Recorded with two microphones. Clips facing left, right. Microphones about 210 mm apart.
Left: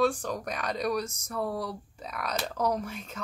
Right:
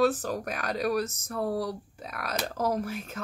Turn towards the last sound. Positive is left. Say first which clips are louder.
# right 3 dB
turn(degrees=-5)  # may be behind; listen again after turning